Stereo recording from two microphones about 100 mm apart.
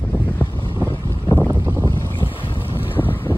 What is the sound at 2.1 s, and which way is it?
Boat, 60° left (ahead or behind).